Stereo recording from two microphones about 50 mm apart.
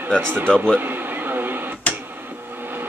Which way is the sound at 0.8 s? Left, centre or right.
Right.